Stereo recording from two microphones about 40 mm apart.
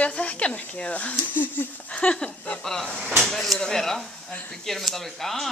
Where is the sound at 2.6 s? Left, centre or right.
Centre.